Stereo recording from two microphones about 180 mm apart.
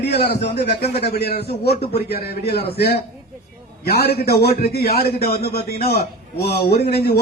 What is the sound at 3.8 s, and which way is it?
A man's voice, 60° left (ahead or behind).